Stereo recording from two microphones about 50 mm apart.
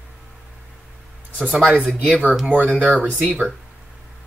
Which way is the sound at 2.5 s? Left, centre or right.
Right.